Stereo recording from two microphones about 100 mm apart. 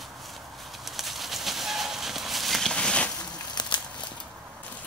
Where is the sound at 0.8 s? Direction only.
Centre (ahead or behind).